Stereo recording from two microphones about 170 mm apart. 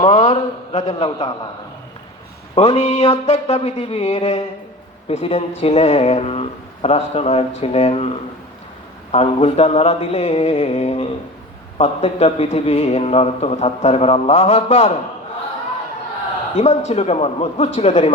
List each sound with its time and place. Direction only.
0.0 s a sound: 45° left (ahead or behind)
0.8 s a man's voice: 30° left (ahead or behind)
2.6 s a man's voice: 40° left (ahead or behind)
9.1 s a man's voice: 40° left (ahead or behind)
16.6 s a man's voice: 40° left (ahead or behind)